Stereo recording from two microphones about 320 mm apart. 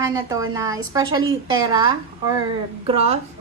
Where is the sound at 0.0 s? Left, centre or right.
Centre.